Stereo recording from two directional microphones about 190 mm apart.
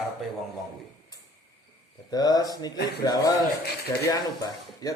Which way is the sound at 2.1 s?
20° left (ahead or behind).